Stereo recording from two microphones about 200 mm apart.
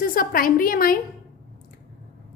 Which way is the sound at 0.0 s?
45° left (ahead or behind).